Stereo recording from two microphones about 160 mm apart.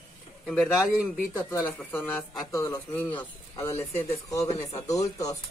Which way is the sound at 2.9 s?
10° left (ahead or behind).